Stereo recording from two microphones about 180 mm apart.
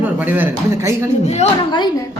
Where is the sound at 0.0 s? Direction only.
10° right (ahead or behind).